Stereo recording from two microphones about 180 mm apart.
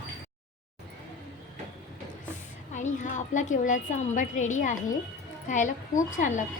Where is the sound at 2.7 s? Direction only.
45° left (ahead or behind).